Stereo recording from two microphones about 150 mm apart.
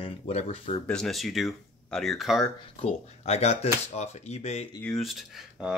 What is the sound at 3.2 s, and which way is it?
Speech, 45° left (ahead or behind).